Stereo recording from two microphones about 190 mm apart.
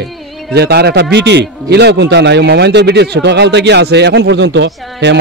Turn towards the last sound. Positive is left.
turn(degrees=-70)  # may be behind; listen again after turning